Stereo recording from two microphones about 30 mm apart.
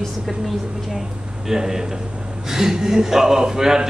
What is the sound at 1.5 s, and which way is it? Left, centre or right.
Speech, centre.